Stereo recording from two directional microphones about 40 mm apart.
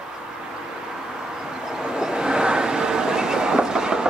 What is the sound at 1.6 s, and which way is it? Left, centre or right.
Vehicle, centre.